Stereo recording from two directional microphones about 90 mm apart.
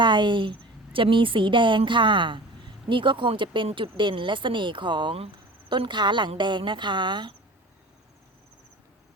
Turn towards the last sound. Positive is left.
turn(degrees=-60)  # may be behind; listen again after turning